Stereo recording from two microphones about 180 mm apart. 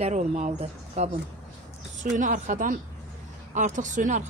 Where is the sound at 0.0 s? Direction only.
40° right (ahead or behind).